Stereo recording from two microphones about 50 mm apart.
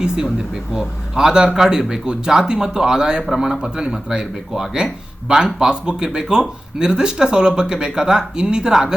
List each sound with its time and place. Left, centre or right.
0.0 s speech: centre